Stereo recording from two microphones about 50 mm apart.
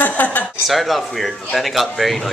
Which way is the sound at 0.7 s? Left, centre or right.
Centre.